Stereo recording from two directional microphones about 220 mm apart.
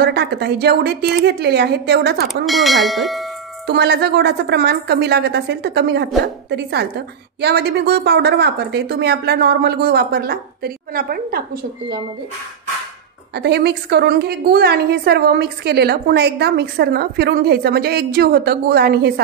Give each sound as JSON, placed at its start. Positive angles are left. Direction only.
{"t": 0.0, "sound": "a woman's voice", "side_deg": -50}
{"t": 2.4, "sound": "speech", "side_deg": 0}
{"t": 3.6, "sound": "a woman's voice", "side_deg": -50}
{"t": 13.3, "sound": "a woman's voice", "side_deg": -50}